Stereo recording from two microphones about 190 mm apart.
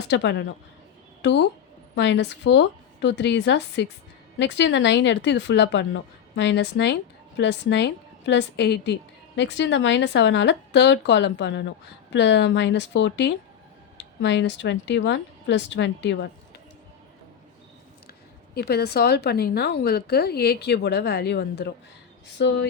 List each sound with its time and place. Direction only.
0.1 s speech: 70° left (ahead or behind)
18.5 s a woman's voice: 60° left (ahead or behind)